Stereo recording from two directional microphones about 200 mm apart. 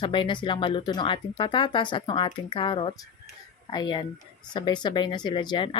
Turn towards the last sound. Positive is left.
turn(degrees=25)  # may be behind; listen again after turning